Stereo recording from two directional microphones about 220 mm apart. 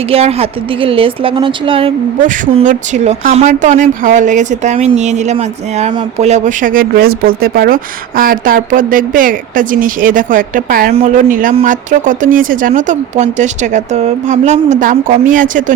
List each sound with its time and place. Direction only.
0.1 s a woman's voice: 25° right (ahead or behind)
2.2 s speech: 35° right (ahead or behind)